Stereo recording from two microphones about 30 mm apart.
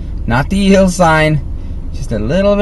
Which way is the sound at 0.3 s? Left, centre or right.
Centre.